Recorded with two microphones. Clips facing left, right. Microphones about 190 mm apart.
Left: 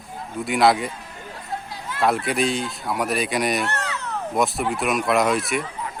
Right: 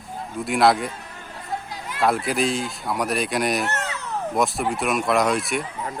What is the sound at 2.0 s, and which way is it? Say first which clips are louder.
Speech: even; centre (ahead or behind).